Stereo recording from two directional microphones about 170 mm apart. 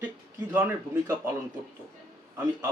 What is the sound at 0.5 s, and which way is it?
Speech, 15° right (ahead or behind).